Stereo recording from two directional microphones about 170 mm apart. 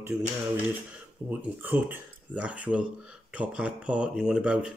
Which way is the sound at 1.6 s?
10° right (ahead or behind).